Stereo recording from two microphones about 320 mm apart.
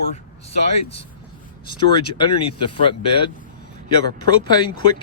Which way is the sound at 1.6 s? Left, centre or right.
Centre.